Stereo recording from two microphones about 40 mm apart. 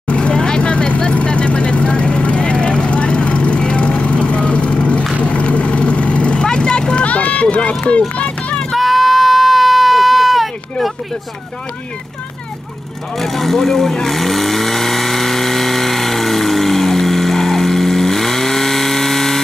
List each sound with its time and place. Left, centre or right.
0.1 s vehicle: left
7.1 s run: left
8.2 s vehicle: left
8.7 s a sound: centre
13.2 s vehicle: centre